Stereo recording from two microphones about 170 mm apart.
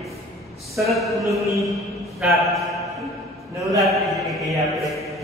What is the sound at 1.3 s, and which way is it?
Mantra, 20° right (ahead or behind).